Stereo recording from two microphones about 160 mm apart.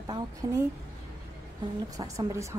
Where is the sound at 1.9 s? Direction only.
20° right (ahead or behind).